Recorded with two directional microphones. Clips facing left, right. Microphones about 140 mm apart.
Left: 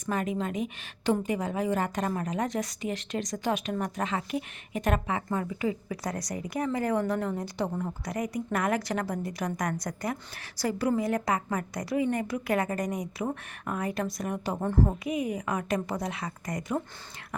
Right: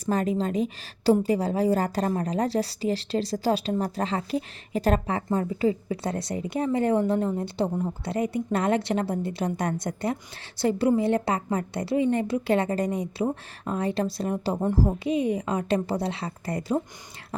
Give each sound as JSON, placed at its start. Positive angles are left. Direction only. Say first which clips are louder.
{"t": 0.0, "sound": "a woman's voice", "louder": "right 5 dB", "side_deg": -35}
{"t": 14.5, "sound": "a woman's voice", "louder": "right 4 dB", "side_deg": -15}
{"t": 15.0, "sound": "a woman's voice", "louder": "right 5 dB", "side_deg": -30}